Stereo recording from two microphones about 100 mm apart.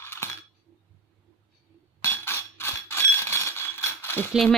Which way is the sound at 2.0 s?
25° left (ahead or behind).